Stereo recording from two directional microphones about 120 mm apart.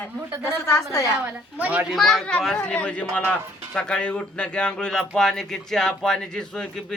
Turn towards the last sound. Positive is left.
turn(degrees=5)  # may be behind; listen again after turning